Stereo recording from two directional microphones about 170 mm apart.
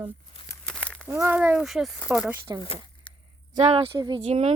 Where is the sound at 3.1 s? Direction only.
30° left (ahead or behind).